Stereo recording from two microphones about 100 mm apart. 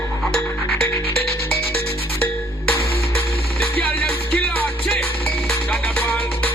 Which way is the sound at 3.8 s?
10° left (ahead or behind).